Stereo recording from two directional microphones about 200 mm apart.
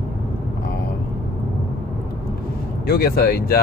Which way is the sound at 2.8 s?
50° left (ahead or behind).